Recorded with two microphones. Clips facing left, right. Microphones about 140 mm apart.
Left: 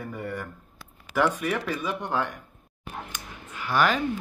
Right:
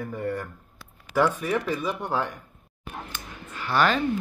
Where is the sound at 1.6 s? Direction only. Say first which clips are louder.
Right 2 dB; 5° right (ahead or behind).